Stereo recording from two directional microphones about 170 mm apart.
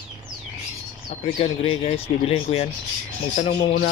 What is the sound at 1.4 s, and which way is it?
Speech, 35° left (ahead or behind).